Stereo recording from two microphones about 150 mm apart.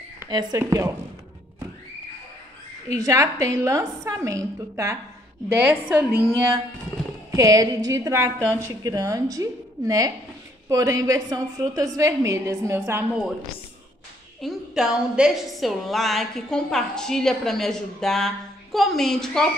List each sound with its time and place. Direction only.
0.3 s a woman's voice: 25° right (ahead or behind)
3.0 s a woman's voice: 20° right (ahead or behind)
7.2 s a woman's voice: 25° right (ahead or behind)
14.4 s a woman's voice: 5° right (ahead or behind)